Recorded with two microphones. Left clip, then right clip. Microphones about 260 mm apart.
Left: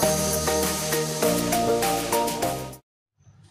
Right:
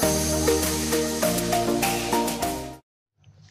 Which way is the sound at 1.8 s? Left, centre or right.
Centre.